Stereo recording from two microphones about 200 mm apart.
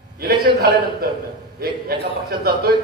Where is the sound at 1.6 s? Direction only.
50° right (ahead or behind).